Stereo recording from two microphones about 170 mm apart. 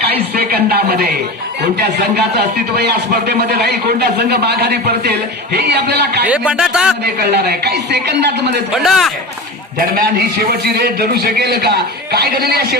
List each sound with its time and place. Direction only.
0.3 s a man's voice: 65° right (ahead or behind)
6.2 s speech: 5° right (ahead or behind)
7.0 s speech: 75° right (ahead or behind)
8.8 s a man's voice: centre (ahead or behind)
9.7 s a man's voice: 55° right (ahead or behind)